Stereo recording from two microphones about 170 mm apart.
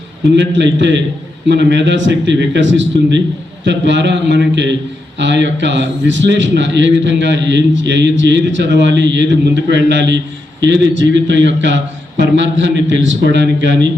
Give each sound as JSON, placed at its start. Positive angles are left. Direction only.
{"t": 0.3, "sound": "a man's voice", "side_deg": -90}